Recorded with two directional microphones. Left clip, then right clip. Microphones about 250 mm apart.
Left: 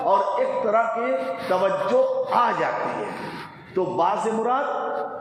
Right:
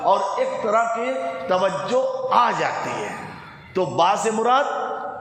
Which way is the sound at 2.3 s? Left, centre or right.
Right.